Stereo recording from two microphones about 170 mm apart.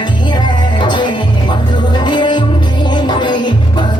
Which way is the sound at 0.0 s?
25° left (ahead or behind).